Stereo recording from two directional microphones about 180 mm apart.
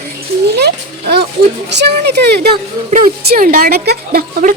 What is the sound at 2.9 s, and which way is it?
Speech, 50° right (ahead or behind).